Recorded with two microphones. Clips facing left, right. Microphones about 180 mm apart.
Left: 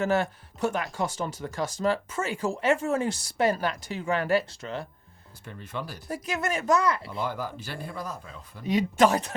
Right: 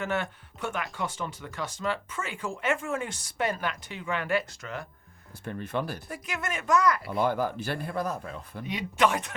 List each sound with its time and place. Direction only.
0.0 s speech: 40° left (ahead or behind)
5.5 s speech: 55° right (ahead or behind)
6.1 s speech: 35° left (ahead or behind)
7.1 s speech: 55° right (ahead or behind)
8.6 s speech: 40° left (ahead or behind)